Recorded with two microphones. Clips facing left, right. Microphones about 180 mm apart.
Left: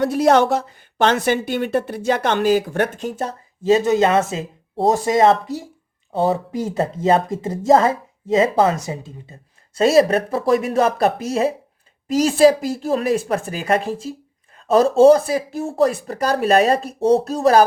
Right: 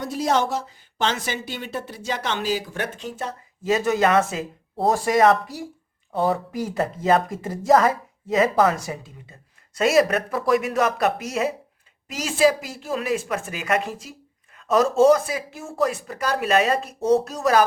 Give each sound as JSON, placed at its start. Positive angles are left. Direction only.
{"t": 0.0, "sound": "speech", "side_deg": 65}
{"t": 3.6, "sound": "a woman's voice", "side_deg": 25}